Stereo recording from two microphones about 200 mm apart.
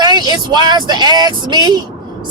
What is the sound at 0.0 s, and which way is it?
Speech, 20° right (ahead or behind).